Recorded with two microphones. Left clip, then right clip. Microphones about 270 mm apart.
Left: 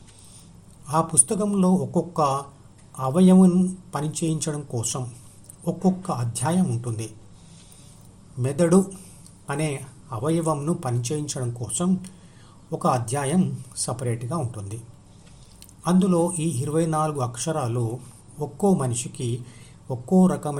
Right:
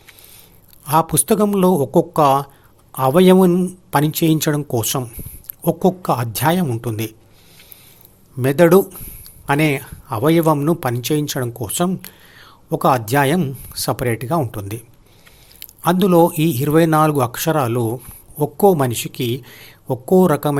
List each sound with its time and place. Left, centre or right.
0.9 s speech: right
8.4 s speech: right